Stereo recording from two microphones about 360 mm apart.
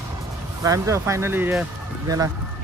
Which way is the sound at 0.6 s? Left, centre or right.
Centre.